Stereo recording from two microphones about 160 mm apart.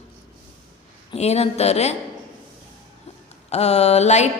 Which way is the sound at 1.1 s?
40° left (ahead or behind).